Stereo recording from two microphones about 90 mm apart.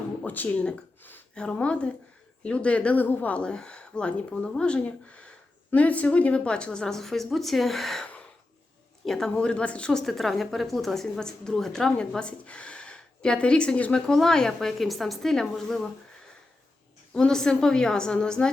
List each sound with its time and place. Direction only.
0.2 s a sound: 20° left (ahead or behind)
1.4 s a woman's voice: 15° left (ahead or behind)
9.0 s a woman's voice: 5° left (ahead or behind)
17.2 s a woman's voice: 5° left (ahead or behind)